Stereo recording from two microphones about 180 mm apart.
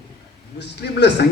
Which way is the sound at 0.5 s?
75° left (ahead or behind).